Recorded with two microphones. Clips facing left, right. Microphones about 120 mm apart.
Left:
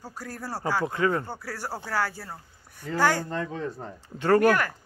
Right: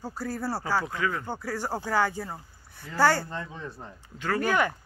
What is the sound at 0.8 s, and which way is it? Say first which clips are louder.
Speech: left 5 dB; 30° left (ahead or behind).